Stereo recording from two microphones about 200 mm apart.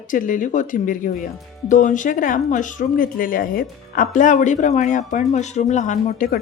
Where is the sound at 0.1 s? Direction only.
40° left (ahead or behind).